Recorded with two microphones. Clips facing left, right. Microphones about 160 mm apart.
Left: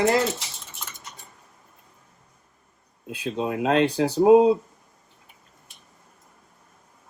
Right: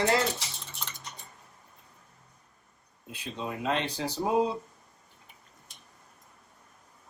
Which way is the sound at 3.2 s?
80° left.